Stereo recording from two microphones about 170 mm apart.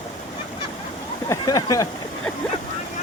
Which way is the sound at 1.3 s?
20° left (ahead or behind).